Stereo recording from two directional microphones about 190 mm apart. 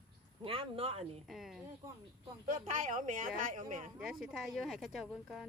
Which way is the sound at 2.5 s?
40° right (ahead or behind).